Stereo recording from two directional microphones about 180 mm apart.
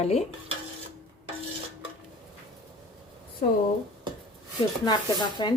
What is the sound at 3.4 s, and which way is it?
Speech, 55° left (ahead or behind).